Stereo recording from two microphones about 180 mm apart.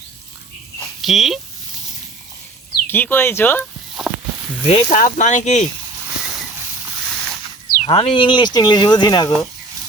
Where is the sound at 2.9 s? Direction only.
10° left (ahead or behind).